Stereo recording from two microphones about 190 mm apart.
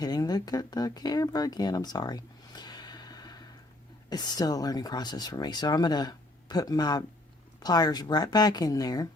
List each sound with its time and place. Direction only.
0.0 s speech: 20° left (ahead or behind)